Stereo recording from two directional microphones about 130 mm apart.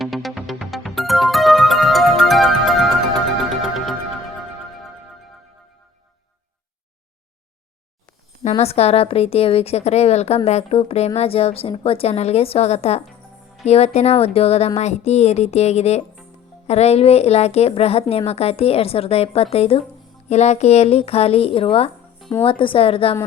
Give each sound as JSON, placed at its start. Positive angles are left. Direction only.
{"t": 0.0, "sound": "music", "side_deg": 0}
{"t": 8.4, "sound": "a woman's voice", "side_deg": 50}